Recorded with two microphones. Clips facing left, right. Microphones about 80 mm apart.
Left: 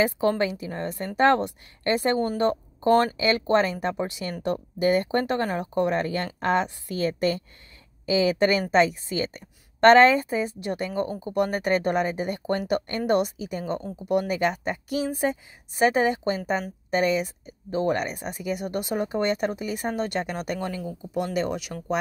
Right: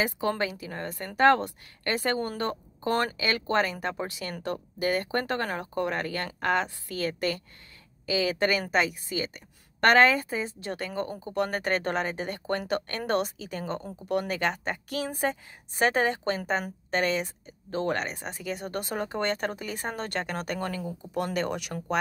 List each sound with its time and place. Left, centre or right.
0.5 s speech: left; by 21.7 s centre